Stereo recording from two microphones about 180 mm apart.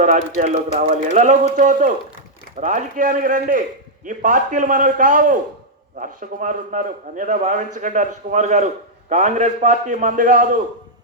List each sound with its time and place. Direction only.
0.0 s a man's voice: 45° right (ahead or behind)